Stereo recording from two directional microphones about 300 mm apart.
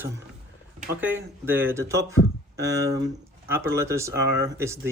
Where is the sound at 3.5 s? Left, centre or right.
Centre.